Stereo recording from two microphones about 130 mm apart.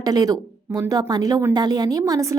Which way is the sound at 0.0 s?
30° right (ahead or behind).